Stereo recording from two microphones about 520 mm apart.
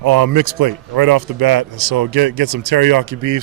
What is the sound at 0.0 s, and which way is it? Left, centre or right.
Speech, right.